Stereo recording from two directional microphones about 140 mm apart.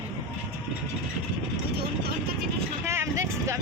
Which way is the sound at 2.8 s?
20° right (ahead or behind).